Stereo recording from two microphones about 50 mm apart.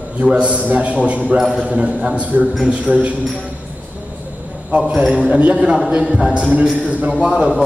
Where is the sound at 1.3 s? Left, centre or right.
Centre.